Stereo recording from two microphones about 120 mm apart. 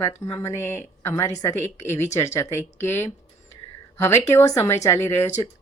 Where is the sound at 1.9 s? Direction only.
70° left (ahead or behind).